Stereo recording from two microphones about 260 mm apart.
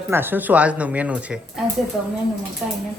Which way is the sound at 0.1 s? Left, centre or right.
Centre.